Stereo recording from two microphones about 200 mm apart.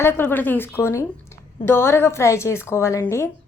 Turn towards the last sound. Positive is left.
turn(degrees=15)  # may be behind; listen again after turning